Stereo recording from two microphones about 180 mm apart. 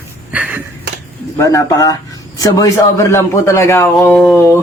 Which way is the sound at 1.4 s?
20° left (ahead or behind).